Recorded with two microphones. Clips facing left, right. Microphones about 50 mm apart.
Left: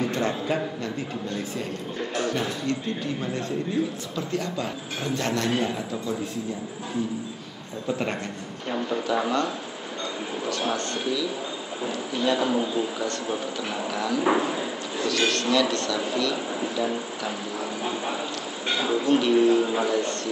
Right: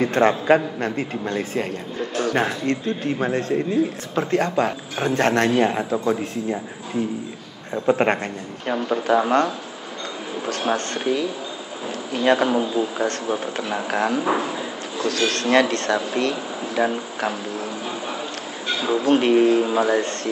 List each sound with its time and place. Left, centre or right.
0.0 s a man's voice: right
7.7 s a man's voice: right
10.7 s a man's voice: right
12.4 s speech: right
13.0 s a man's voice: right
19.0 s a man's voice: right